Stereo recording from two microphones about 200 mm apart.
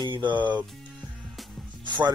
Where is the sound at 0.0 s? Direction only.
20° right (ahead or behind).